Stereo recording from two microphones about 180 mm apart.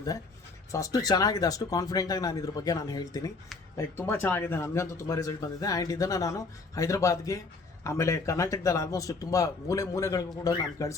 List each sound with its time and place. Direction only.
0.7 s speech: 20° left (ahead or behind)